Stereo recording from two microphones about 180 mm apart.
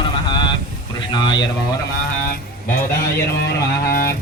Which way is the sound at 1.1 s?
25° left (ahead or behind).